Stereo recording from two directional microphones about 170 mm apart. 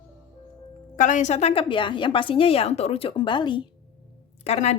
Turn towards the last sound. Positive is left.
turn(degrees=40)  # may be behind; listen again after turning